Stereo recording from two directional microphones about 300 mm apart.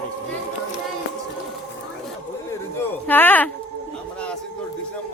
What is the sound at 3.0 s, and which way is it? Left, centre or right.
Speech, centre.